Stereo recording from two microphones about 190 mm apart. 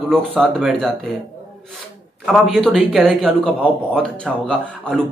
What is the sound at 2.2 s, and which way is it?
A man's voice, centre (ahead or behind).